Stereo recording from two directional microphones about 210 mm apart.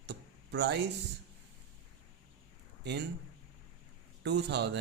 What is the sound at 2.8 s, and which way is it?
Speech, 55° right (ahead or behind).